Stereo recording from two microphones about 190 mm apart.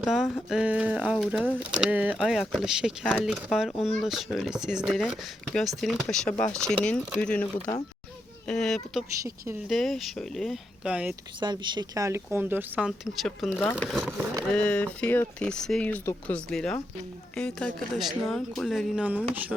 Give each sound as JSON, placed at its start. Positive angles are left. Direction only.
{"t": 0.0, "sound": "speech", "side_deg": 0}
{"t": 11.3, "sound": "speech", "side_deg": -25}
{"t": 13.2, "sound": "speech", "side_deg": 5}